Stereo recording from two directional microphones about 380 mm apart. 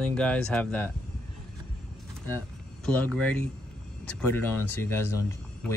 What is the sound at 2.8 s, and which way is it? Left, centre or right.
Speech, centre.